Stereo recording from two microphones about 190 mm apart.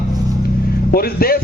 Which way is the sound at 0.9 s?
50° left (ahead or behind).